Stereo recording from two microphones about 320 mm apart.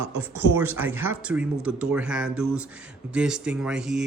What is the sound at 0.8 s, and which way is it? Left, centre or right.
Speech, centre.